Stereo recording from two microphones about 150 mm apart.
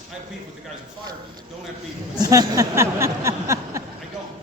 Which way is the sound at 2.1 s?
25° right (ahead or behind).